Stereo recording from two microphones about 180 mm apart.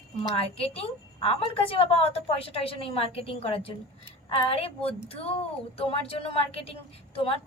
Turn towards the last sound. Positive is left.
turn(degrees=30)  # may be behind; listen again after turning